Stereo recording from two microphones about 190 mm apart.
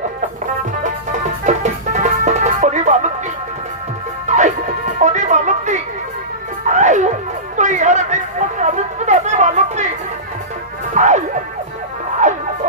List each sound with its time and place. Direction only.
1.4 s music: 35° right (ahead or behind)
4.3 s music: 40° right (ahead or behind)
7.5 s chatter: 40° right (ahead or behind)
11.0 s music: 40° right (ahead or behind)